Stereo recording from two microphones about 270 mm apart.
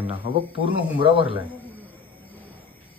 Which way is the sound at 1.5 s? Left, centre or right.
Centre.